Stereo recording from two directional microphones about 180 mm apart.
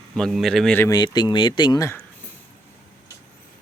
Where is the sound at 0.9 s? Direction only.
25° left (ahead or behind).